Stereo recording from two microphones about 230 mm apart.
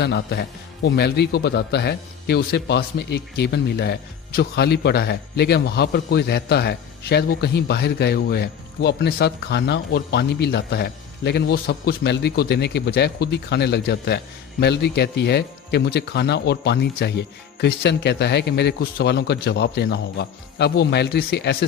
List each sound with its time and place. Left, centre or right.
0.0 s a man's voice: left